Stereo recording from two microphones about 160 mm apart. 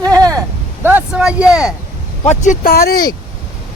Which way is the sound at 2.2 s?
50° left (ahead or behind).